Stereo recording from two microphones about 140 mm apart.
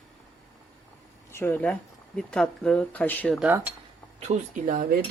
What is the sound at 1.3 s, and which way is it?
Speech, 15° left (ahead or behind).